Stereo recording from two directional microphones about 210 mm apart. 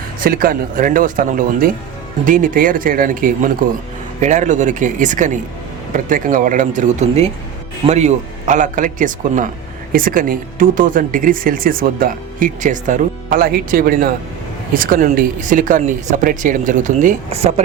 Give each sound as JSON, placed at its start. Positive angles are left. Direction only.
{"t": 0.2, "sound": "speech", "side_deg": -40}